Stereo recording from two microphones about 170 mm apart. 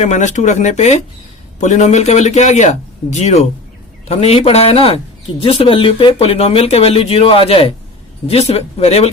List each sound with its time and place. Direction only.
0.0 s a man's voice: 45° left (ahead or behind)